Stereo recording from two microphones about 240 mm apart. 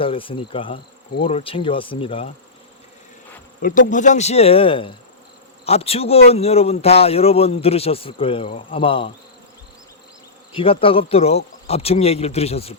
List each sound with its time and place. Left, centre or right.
0.0 s a man's voice: left
3.6 s a man's voice: left
10.5 s a man's voice: left